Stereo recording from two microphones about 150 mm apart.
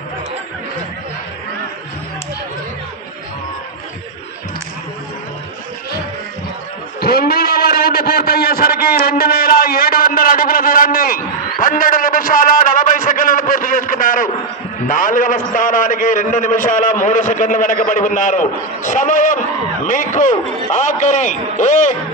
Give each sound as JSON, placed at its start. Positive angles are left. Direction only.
{"t": 7.0, "sound": "a man's voice", "side_deg": 90}